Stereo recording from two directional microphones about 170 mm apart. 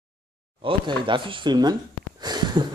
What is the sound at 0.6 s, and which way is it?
Speech, 30° right (ahead or behind).